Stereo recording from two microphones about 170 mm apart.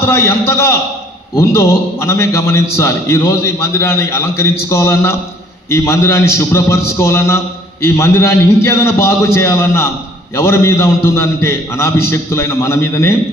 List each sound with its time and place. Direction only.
0.0 s a man's voice: 15° left (ahead or behind)